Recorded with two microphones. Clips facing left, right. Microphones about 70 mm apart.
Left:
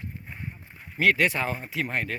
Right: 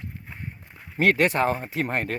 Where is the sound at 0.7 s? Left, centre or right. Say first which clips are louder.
Right 2 dB; right.